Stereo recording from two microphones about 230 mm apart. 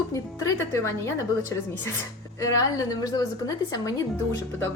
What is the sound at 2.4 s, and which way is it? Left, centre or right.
A woman's voice, centre.